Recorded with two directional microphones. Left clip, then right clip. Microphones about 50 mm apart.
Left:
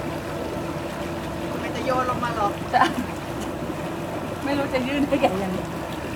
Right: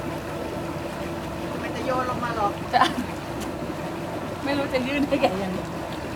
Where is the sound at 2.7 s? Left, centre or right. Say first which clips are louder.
Left 1 dB; right.